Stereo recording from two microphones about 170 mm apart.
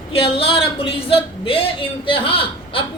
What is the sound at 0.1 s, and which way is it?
A man's voice, 35° left (ahead or behind).